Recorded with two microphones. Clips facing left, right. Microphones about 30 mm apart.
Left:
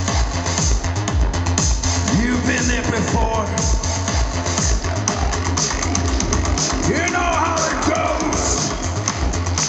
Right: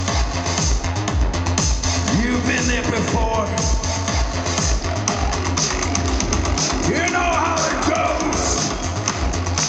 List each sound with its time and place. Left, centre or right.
1.6 s music: centre
6.3 s music: centre